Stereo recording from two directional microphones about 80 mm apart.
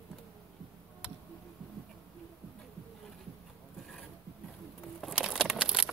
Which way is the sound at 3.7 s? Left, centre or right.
Centre.